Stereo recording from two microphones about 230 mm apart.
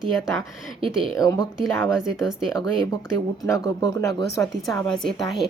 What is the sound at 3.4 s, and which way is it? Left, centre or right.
Speech, centre.